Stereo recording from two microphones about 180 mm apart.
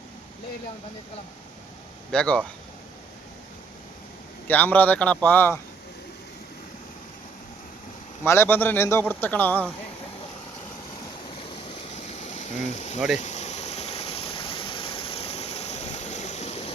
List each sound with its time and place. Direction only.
2.1 s speech: 5° left (ahead or behind)
4.4 s speech: 10° left (ahead or behind)
8.2 s speech: 15° left (ahead or behind)
12.0 s a sound: 40° left (ahead or behind)